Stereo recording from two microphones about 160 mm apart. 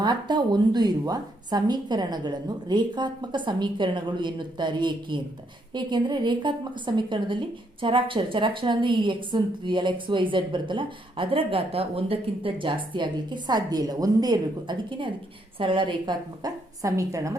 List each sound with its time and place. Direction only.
0.0 s a woman's voice: 25° right (ahead or behind)